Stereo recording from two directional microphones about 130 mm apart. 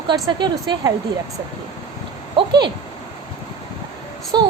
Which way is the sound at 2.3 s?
35° right (ahead or behind).